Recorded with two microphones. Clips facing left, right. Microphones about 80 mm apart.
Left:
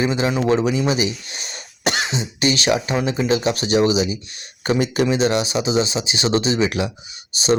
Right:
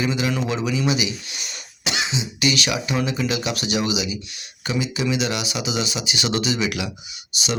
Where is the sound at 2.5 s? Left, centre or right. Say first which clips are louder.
Left 5 dB; left.